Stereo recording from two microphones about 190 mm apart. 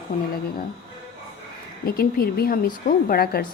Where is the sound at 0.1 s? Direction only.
45° left (ahead or behind).